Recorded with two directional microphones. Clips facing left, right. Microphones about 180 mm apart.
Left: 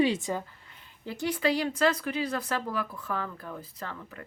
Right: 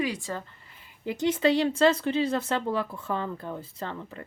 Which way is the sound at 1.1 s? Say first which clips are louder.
Right 4 dB; 20° right (ahead or behind).